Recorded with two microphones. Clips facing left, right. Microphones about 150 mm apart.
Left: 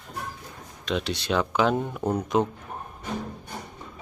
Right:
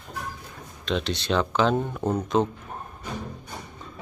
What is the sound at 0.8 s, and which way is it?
Speech, 10° left (ahead or behind).